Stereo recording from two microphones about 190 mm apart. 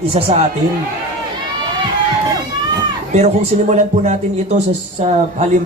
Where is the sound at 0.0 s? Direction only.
30° right (ahead or behind).